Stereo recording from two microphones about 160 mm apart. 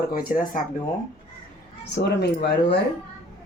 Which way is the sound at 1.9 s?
90° left.